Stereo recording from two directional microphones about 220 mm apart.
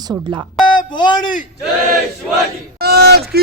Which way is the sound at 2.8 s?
45° right (ahead or behind).